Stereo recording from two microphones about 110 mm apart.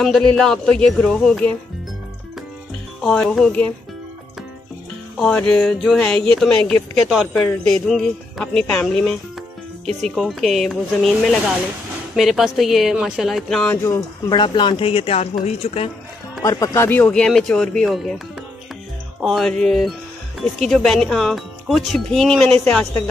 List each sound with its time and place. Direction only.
0.0 s speech: 5° left (ahead or behind)
3.0 s a sound: 5° left (ahead or behind)
5.5 s a sound: 5° left (ahead or behind)
6.5 s speech: 5° left (ahead or behind)
14.3 s speech: 45° left (ahead or behind)
15.4 s speech: 70° left (ahead or behind)
16.4 s speech: 30° left (ahead or behind)
17.1 s speech: 5° left (ahead or behind)
19.2 s speech: 5° left (ahead or behind)